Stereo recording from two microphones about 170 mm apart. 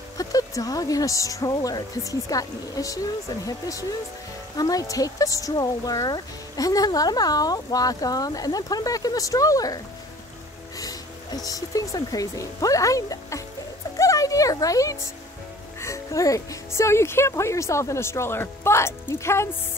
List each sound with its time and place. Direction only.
0.2 s speech: 20° left (ahead or behind)
10.8 s speech: 20° left (ahead or behind)
13.9 s music: 20° left (ahead or behind)
15.8 s speech: 20° left (ahead or behind)